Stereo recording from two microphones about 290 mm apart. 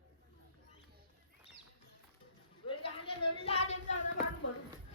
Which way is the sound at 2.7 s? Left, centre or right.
Centre.